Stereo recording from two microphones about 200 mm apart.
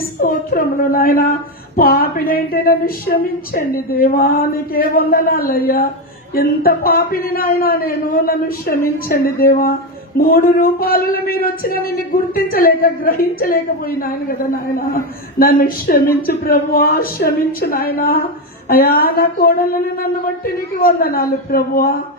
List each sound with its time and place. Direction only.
0.2 s speech: 45° left (ahead or behind)